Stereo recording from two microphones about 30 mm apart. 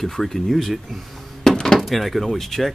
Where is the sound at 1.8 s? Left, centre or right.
Centre.